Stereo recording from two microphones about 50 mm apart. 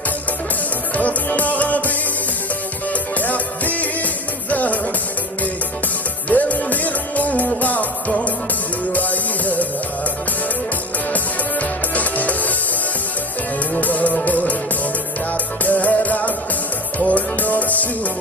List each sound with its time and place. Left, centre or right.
0.9 s music: left
6.2 s music: left
11.6 s music: left
13.7 s music: left